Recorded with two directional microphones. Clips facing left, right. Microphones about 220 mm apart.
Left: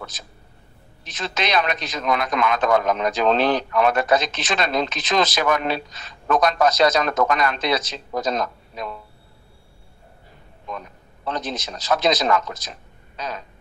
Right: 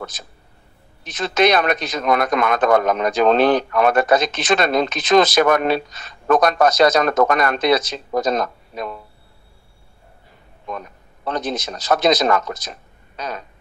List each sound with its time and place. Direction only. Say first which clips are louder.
1.2 s a man's voice: right 7 dB; 50° right (ahead or behind)
11.2 s a man's voice: right 4 dB; 50° right (ahead or behind)